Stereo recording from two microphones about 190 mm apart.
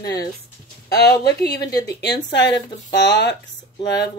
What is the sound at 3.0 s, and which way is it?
Speech, 65° left (ahead or behind).